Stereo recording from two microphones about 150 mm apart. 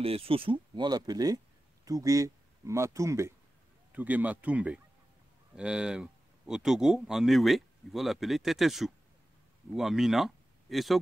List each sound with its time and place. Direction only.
0.0 s speech: 40° right (ahead or behind); by 11.0 s centre (ahead or behind)